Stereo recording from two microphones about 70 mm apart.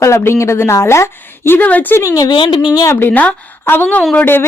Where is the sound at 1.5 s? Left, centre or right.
Left.